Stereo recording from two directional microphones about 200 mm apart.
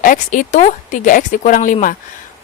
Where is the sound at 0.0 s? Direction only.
40° left (ahead or behind).